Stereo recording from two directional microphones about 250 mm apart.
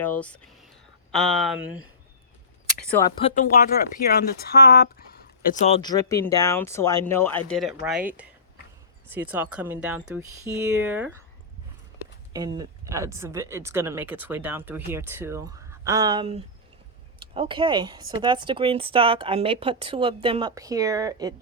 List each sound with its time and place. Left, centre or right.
0.0 s speech: centre
3.0 s speech: centre
3.9 s speech: left
5.5 s speech: left; by 11.1 s centre
12.3 s speech: centre